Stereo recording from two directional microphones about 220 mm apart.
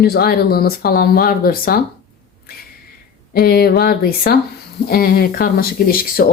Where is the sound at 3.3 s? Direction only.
45° left (ahead or behind).